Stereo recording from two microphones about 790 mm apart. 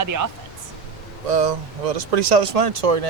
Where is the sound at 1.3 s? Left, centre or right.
Right.